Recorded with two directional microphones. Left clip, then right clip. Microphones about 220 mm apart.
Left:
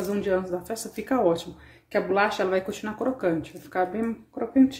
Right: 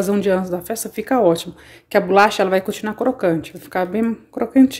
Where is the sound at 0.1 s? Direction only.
35° right (ahead or behind).